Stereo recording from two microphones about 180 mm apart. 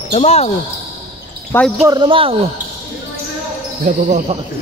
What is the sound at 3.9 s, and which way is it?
Speech, 40° right (ahead or behind).